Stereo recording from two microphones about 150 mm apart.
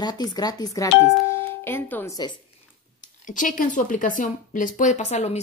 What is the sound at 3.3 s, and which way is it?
Speech, 60° left (ahead or behind).